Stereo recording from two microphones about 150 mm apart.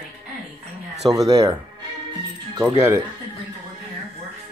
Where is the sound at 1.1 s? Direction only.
25° right (ahead or behind).